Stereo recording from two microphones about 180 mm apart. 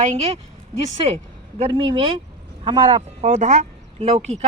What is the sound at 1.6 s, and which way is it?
Speech, 30° right (ahead or behind).